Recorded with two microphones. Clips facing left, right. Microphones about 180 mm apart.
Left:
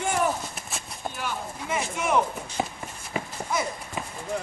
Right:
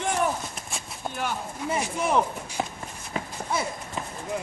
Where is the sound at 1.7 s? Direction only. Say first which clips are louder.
Right 1 dB; 35° right (ahead or behind).